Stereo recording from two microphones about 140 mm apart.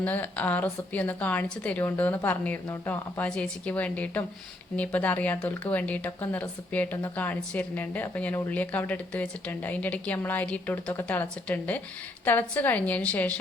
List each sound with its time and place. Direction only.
0.0 s speech: 10° left (ahead or behind)